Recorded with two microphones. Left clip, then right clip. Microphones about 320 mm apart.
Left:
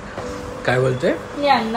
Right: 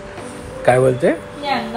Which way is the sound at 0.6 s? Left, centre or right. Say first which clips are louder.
Right 5 dB; centre.